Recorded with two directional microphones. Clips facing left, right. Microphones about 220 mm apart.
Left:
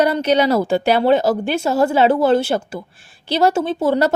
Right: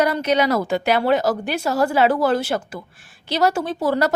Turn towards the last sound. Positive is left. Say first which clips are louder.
# left 3 dB
turn(degrees=25)  # may be behind; listen again after turning